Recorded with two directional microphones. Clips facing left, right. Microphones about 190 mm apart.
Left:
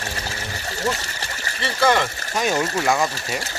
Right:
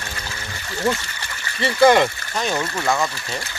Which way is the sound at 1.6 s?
15° right (ahead or behind).